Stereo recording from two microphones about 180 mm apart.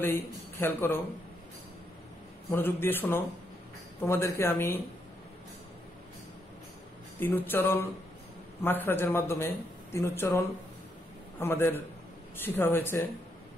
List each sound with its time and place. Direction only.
0.0 s speech: 10° left (ahead or behind)
2.5 s speech: 10° left (ahead or behind)
7.2 s speech: 10° left (ahead or behind)